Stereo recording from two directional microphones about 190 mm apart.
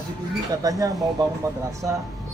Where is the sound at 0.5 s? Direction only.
20° right (ahead or behind).